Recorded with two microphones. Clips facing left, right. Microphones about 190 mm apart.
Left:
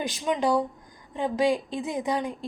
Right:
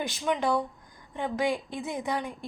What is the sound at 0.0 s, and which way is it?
A woman's voice, 15° left (ahead or behind).